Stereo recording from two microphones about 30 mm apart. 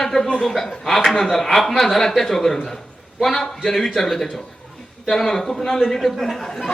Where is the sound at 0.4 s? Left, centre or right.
Centre.